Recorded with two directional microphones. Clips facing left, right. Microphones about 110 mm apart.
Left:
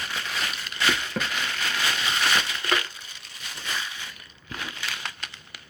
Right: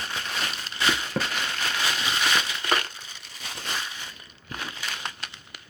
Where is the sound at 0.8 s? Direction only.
25° right (ahead or behind).